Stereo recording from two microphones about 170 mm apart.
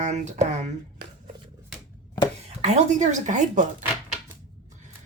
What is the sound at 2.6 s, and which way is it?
Speech, 45° right (ahead or behind).